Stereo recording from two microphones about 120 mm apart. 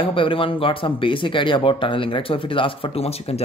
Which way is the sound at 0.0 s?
45° left (ahead or behind).